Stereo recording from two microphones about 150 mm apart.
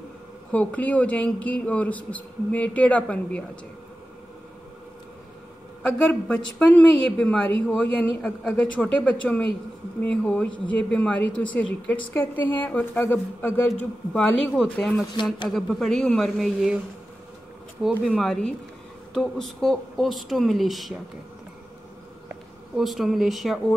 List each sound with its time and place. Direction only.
0.5 s a woman's voice: 10° left (ahead or behind)
5.8 s a woman's voice: 5° left (ahead or behind)
17.8 s speech: centre (ahead or behind)
22.3 s speech: centre (ahead or behind)